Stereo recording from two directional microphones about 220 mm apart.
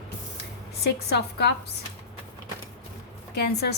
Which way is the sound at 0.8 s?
50° left (ahead or behind).